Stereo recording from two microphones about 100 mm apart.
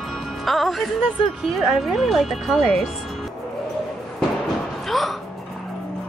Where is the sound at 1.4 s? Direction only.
Centre (ahead or behind).